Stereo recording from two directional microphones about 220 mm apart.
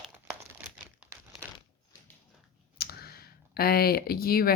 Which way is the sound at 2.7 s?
45° left (ahead or behind).